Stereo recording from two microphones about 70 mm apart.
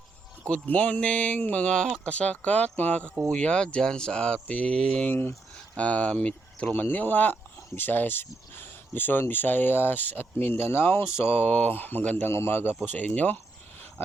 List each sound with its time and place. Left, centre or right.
0.4 s speech: centre
5.0 s speech: left
5.7 s speech: centre